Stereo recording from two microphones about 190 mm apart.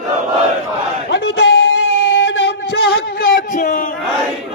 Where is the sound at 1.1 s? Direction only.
65° left (ahead or behind).